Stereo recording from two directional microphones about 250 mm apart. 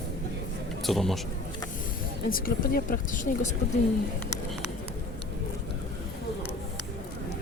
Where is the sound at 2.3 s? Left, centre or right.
Left.